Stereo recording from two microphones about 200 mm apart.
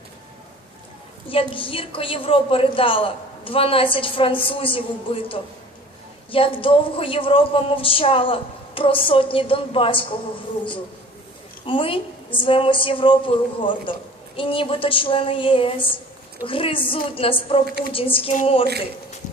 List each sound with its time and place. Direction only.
1.3 s a woman's voice: 25° left (ahead or behind)
11.6 s a woman's voice: 25° left (ahead or behind)